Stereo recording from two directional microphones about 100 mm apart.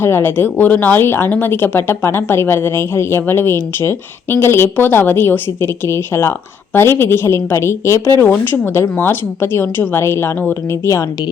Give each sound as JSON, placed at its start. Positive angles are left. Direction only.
{"t": 0.0, "sound": "speech", "side_deg": 25}